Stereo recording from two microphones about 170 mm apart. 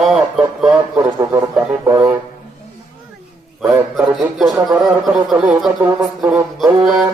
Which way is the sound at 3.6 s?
5° right (ahead or behind).